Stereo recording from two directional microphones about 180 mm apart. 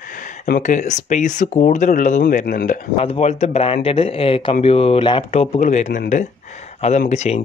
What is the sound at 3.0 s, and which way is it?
Speech, 35° left (ahead or behind).